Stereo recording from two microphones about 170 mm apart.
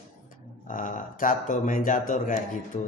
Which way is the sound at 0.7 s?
50° left (ahead or behind).